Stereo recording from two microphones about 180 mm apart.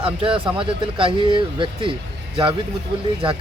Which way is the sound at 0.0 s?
30° right (ahead or behind).